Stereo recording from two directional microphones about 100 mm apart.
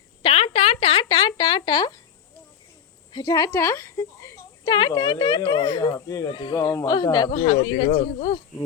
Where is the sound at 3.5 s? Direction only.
30° left (ahead or behind).